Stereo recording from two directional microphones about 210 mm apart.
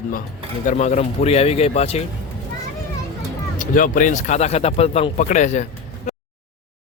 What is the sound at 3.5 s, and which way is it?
Speech, 40° left (ahead or behind).